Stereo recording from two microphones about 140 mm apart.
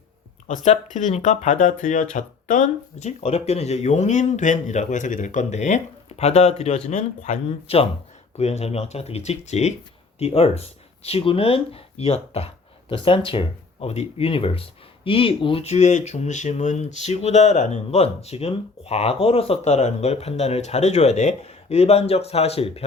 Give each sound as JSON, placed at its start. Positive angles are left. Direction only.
{"t": 0.4, "sound": "speech", "side_deg": 60}